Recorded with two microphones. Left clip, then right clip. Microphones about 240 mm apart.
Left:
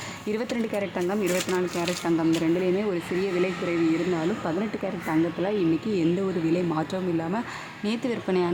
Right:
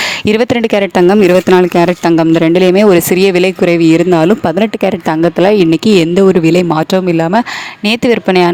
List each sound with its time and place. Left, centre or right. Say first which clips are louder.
0.0 s speech: right 19 dB; right